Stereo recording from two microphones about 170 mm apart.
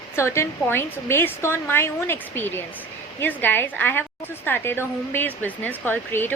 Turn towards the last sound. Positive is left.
turn(degrees=10)  # may be behind; listen again after turning